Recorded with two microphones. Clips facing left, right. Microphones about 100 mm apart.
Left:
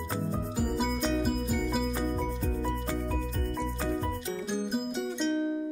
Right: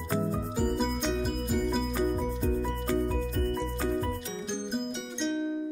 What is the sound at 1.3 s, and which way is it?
Music, centre (ahead or behind).